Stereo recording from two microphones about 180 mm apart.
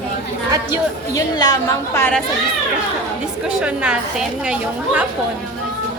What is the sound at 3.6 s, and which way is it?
A woman's voice, 5° right (ahead or behind).